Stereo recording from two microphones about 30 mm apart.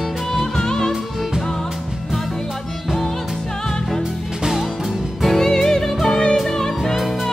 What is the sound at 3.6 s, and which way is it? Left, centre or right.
Music, centre.